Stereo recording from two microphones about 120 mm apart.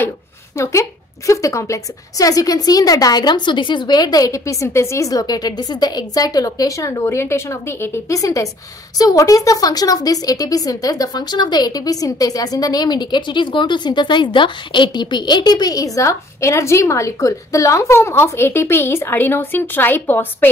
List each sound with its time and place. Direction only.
0.6 s a woman's voice: 25° left (ahead or behind)